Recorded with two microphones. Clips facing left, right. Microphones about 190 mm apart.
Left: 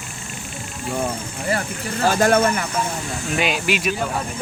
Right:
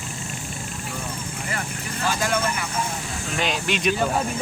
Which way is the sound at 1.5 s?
40° left (ahead or behind).